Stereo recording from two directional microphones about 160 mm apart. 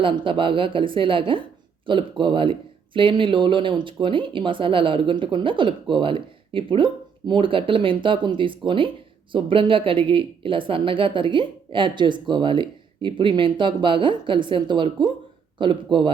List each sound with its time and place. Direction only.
0.0 s speech: 30° right (ahead or behind)